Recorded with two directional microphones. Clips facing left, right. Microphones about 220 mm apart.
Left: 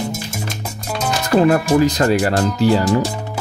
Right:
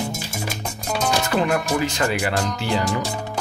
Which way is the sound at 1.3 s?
40° left (ahead or behind).